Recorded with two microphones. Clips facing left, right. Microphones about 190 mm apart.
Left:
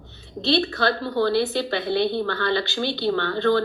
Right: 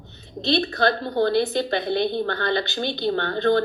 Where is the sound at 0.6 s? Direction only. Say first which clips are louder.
Right 1 dB; 40° right (ahead or behind).